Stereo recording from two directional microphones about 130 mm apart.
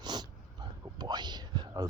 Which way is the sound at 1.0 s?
35° right (ahead or behind).